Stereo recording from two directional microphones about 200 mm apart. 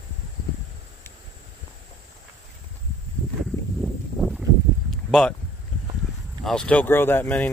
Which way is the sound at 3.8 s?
Centre (ahead or behind).